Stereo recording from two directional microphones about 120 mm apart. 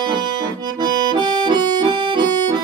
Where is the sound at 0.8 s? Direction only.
35° right (ahead or behind).